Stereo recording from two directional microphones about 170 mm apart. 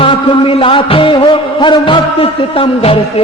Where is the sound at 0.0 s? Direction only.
30° left (ahead or behind).